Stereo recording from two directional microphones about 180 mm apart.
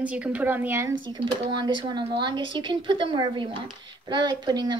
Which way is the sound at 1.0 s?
25° right (ahead or behind).